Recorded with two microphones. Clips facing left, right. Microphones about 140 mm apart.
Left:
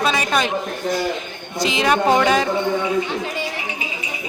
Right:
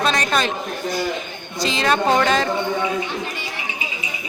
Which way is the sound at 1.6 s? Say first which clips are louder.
Left 2 dB; 15° left (ahead or behind).